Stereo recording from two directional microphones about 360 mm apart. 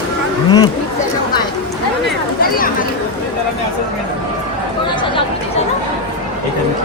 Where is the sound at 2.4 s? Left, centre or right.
Left.